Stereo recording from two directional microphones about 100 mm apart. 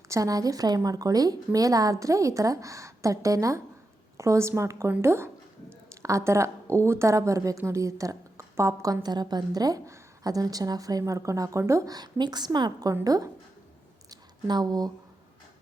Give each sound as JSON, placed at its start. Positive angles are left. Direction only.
{"t": 0.1, "sound": "a woman's voice", "side_deg": -35}
{"t": 9.0, "sound": "a woman's voice", "side_deg": -45}